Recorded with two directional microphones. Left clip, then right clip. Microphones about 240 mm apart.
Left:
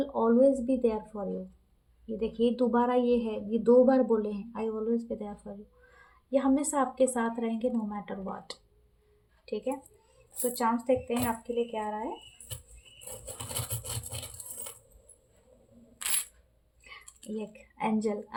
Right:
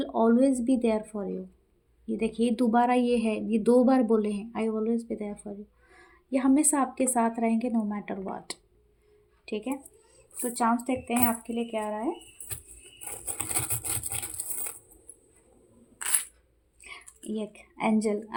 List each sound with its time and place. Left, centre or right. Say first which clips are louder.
0.0 s speech: even; right
6.3 s speech: right 2 dB; right
17.3 s speech: right 3 dB; right